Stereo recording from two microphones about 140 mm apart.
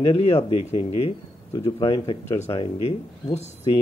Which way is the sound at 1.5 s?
30° left (ahead or behind).